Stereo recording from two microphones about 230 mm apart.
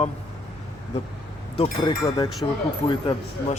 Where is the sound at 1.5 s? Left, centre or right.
Left.